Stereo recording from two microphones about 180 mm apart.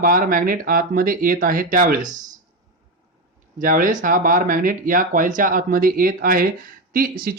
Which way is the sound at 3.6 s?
50° right (ahead or behind).